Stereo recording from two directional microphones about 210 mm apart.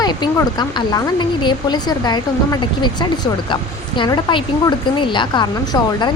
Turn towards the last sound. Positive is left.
turn(degrees=20)  # may be behind; listen again after turning